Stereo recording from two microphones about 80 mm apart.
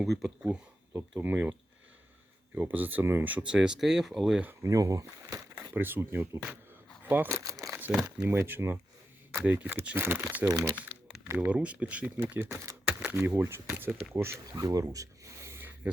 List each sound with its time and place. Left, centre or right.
0.0 s speech: centre
1.2 s speech: right
2.6 s speech: right; by 4.4 s centre
4.6 s speech: right
5.7 s speech: right
8.2 s speech: right
10.4 s speech: right
11.3 s speech: centre
12.2 s speech: right
12.8 s a sound: right
13.1 s speech: right
14.5 s a sound: right